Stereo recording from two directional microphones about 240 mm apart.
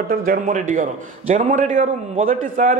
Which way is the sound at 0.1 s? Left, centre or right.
Right.